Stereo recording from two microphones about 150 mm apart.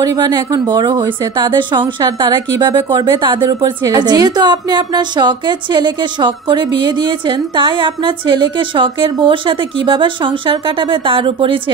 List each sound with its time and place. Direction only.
0.0 s speech: 25° right (ahead or behind)